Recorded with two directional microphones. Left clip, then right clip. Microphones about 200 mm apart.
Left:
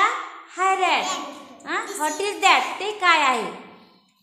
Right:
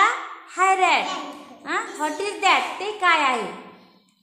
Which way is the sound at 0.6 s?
15° right (ahead or behind).